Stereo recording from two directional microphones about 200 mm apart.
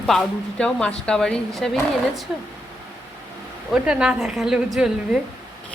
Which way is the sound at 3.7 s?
5° right (ahead or behind).